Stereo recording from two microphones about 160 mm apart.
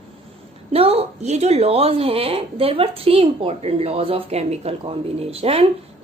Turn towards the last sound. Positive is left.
turn(degrees=-35)  # may be behind; listen again after turning